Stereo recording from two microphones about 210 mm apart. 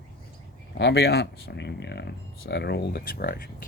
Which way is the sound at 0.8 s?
50° left (ahead or behind).